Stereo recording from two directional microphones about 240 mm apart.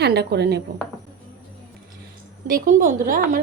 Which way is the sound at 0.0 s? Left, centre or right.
Right.